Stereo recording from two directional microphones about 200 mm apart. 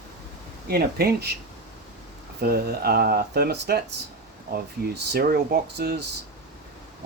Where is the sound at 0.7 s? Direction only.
50° right (ahead or behind).